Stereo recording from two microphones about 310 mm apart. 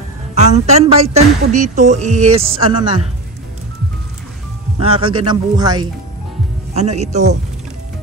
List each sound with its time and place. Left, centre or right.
0.3 s a woman's voice: right
4.7 s a man's voice: centre